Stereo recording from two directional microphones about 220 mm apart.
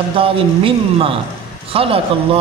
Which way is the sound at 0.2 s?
25° right (ahead or behind).